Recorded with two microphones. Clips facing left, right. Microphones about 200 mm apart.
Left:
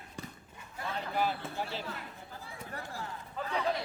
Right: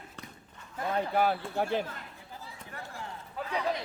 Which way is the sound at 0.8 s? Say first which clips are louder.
Right 5 dB; 50° right (ahead or behind).